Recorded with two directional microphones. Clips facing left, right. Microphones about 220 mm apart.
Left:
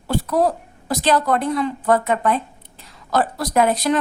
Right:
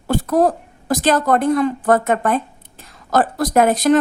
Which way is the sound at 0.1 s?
45° right (ahead or behind).